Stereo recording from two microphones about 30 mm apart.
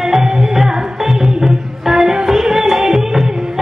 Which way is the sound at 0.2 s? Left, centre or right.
Centre.